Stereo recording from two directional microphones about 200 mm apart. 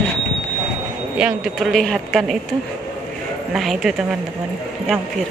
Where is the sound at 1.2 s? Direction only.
Centre (ahead or behind).